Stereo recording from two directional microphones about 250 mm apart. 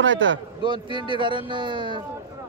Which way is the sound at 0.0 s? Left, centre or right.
Right.